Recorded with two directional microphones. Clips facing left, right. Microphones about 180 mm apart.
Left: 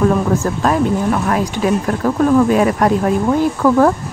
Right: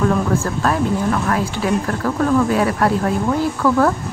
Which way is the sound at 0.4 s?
20° left (ahead or behind).